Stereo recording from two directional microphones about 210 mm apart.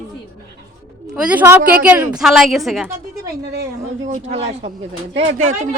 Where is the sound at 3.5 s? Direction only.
50° right (ahead or behind).